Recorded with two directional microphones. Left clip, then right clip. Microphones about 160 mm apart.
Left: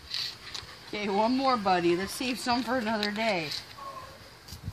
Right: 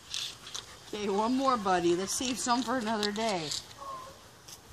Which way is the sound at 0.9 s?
45° left (ahead or behind).